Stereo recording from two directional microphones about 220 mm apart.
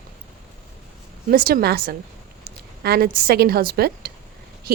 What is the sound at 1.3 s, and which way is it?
A woman's voice, 40° right (ahead or behind).